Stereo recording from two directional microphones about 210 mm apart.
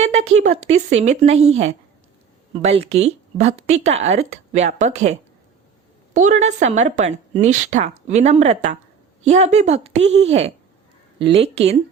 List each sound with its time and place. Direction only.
0.0 s a woman's voice: 30° right (ahead or behind)